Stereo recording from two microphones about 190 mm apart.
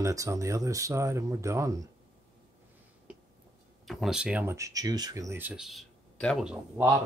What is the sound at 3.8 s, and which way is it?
Speech, centre (ahead or behind).